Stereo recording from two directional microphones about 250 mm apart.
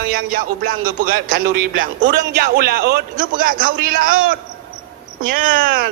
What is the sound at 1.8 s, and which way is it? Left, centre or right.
Speech, right.